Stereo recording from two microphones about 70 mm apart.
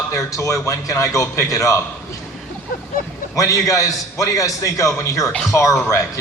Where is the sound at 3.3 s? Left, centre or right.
Left.